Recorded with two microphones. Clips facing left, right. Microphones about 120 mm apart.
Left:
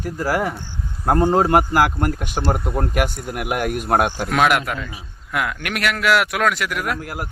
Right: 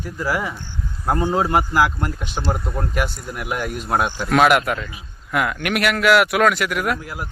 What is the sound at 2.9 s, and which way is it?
Speech, 55° left (ahead or behind).